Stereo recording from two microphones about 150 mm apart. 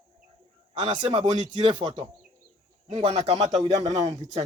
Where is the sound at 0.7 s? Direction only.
30° right (ahead or behind).